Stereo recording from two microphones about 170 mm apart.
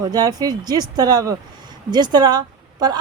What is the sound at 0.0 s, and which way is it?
A woman's voice, 25° right (ahead or behind).